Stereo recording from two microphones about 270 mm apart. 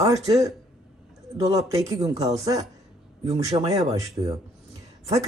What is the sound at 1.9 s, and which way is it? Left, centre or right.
Speech, right.